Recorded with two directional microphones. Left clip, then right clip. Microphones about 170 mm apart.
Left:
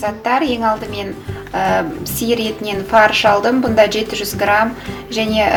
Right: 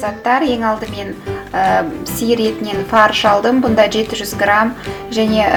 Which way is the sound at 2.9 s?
20° right (ahead or behind).